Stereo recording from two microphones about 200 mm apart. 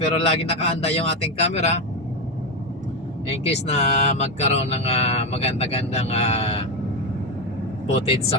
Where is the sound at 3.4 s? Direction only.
35° left (ahead or behind).